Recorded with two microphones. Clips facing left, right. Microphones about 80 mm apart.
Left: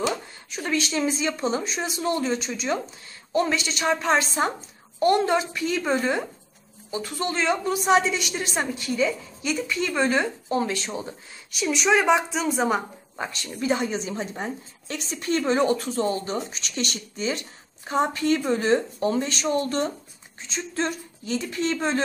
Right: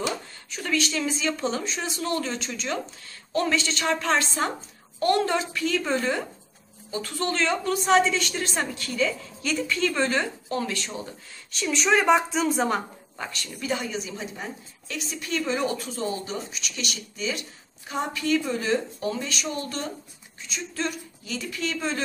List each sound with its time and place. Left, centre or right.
0.0 s a woman's voice: centre
11.5 s a woman's voice: centre
13.1 s a woman's voice: left